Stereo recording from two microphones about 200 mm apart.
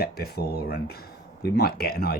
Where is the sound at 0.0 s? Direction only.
50° left (ahead or behind).